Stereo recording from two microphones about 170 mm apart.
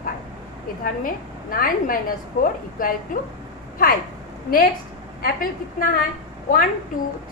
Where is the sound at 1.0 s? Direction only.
55° left (ahead or behind).